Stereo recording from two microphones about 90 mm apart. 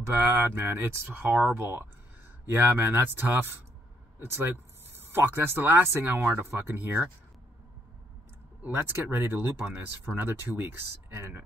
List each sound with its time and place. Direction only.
0.2 s speech: 25° right (ahead or behind)
8.6 s speech: 25° right (ahead or behind)